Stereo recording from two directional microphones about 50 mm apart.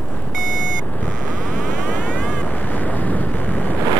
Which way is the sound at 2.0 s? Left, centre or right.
Left.